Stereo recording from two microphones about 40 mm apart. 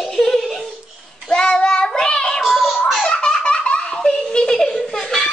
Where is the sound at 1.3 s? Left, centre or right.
Centre.